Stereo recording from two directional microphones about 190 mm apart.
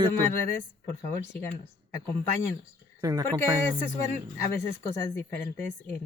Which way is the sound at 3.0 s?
20° right (ahead or behind).